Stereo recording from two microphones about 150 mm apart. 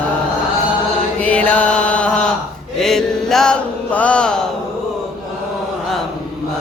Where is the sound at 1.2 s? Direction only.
10° left (ahead or behind).